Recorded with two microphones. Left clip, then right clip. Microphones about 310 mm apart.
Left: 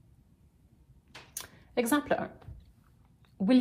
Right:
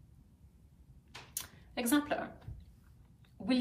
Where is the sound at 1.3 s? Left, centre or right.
Left.